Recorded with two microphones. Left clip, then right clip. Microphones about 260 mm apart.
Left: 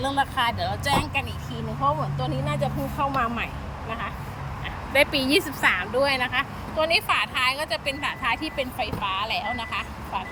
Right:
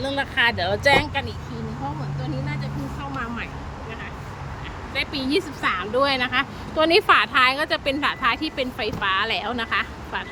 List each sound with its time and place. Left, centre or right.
0.1 s speech: right
0.5 s a woman's voice: centre
2.5 s speech: centre
4.9 s speech: centre
6.2 s speech: right
6.7 s a woman's voice: centre